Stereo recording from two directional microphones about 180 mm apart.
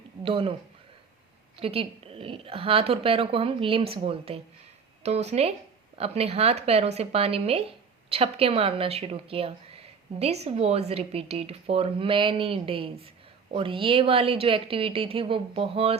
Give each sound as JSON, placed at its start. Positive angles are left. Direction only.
{"t": 0.2, "sound": "speech", "side_deg": -30}
{"t": 1.5, "sound": "a woman's voice", "side_deg": -30}